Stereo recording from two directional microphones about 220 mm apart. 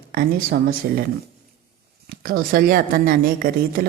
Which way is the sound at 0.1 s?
40° right (ahead or behind).